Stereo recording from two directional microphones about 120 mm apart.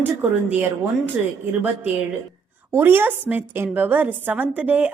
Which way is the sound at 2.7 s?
20° right (ahead or behind).